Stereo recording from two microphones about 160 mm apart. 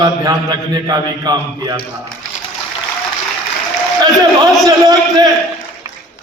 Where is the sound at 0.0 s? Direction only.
25° right (ahead or behind).